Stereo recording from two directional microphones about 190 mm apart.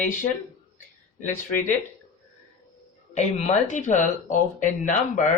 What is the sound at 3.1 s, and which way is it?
Speech, 35° left (ahead or behind).